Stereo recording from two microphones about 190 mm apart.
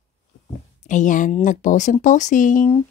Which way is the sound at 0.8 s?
40° left (ahead or behind).